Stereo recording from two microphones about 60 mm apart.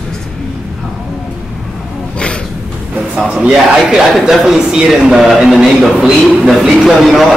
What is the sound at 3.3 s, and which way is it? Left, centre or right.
A man's voice, centre.